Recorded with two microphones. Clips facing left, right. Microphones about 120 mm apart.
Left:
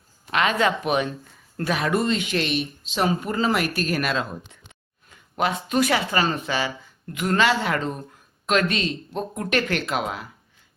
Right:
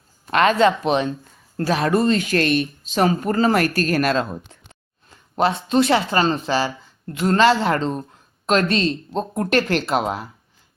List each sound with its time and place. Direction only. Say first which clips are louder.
0.3 s speech: right 5 dB; 40° right (ahead or behind)
4.7 s a sound: right 3 dB; 35° right (ahead or behind)
6.1 s speech: right 4 dB; 30° right (ahead or behind)